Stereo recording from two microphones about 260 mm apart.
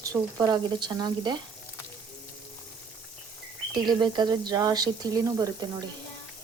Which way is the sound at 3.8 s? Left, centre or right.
Centre.